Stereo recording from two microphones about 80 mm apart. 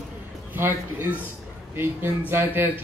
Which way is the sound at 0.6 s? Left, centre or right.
Right.